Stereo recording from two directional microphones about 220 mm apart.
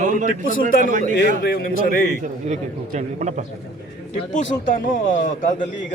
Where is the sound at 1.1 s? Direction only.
50° left (ahead or behind).